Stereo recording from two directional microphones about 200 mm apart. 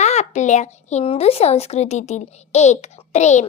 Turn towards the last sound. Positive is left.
turn(degrees=35)  # may be behind; listen again after turning